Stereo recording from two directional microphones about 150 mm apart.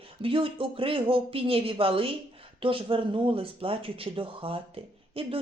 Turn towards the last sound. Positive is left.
turn(degrees=-40)  # may be behind; listen again after turning